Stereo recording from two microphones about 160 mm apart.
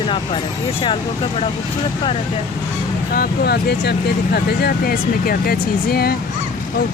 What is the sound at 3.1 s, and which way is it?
Speech, 80° left.